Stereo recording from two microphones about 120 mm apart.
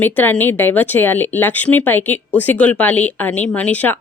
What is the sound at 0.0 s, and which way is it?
Speech, 15° left (ahead or behind).